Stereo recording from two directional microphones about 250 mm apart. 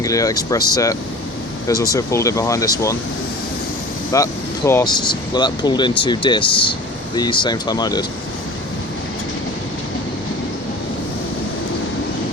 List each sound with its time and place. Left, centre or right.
0.0 s speech: centre
4.1 s speech: centre